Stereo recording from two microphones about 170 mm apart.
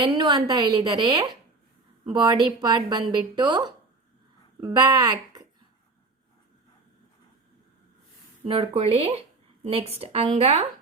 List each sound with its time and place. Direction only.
0.0 s a woman's voice: 25° right (ahead or behind)
8.4 s speech: 35° right (ahead or behind)